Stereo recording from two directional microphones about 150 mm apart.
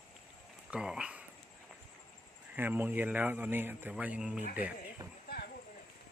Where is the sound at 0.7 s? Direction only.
5° right (ahead or behind).